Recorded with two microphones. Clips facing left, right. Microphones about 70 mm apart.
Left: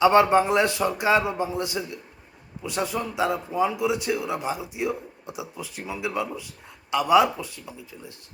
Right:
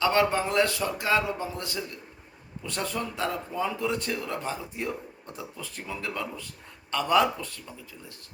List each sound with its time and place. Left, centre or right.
0.0 s a man's voice: left